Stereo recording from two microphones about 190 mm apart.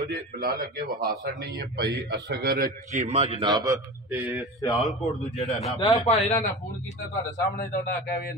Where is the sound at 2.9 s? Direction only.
35° right (ahead or behind).